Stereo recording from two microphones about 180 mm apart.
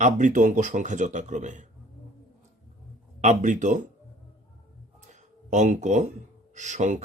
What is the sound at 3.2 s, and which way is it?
Speech, 40° right (ahead or behind).